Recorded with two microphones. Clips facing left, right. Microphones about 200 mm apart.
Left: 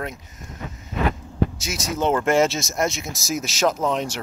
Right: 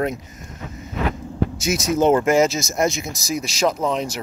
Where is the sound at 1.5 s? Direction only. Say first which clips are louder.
Right 7 dB; centre (ahead or behind).